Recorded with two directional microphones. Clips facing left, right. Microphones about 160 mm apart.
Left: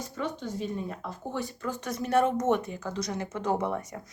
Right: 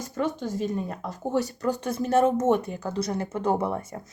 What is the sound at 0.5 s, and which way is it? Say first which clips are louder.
Speech: right 4 dB; 45° right (ahead or behind).